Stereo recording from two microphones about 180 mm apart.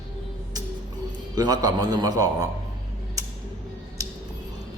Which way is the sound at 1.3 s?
20° right (ahead or behind).